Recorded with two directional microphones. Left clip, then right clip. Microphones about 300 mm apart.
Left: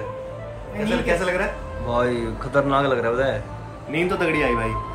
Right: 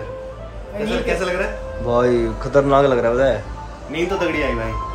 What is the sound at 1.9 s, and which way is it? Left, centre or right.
A man's voice, centre.